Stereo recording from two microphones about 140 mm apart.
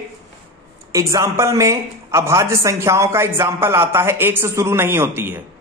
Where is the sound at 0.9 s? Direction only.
20° right (ahead or behind).